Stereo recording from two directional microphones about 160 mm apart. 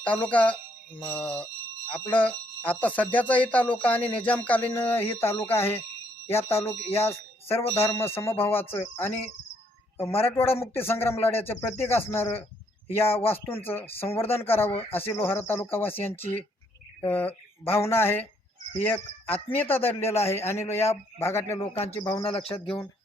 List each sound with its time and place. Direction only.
0.0 s speech: 10° left (ahead or behind)
14.7 s speech: 35° left (ahead or behind)
15.1 s speech: 15° left (ahead or behind)
21.7 s speech: 40° left (ahead or behind)
21.9 s speech: 15° left (ahead or behind)
22.2 s speech: 35° left (ahead or behind)